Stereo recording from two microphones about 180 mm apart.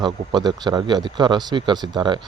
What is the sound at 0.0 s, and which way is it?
Speech, 25° right (ahead or behind).